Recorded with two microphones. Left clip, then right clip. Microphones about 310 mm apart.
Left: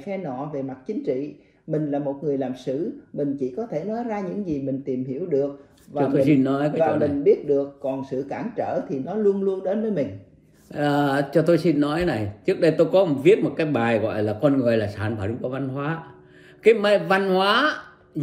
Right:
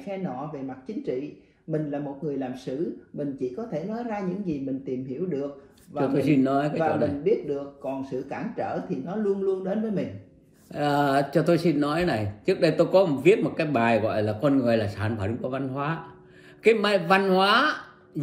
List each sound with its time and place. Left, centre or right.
0.4 s speech: left
5.9 s speech: centre
7.2 s speech: left
10.7 s speech: centre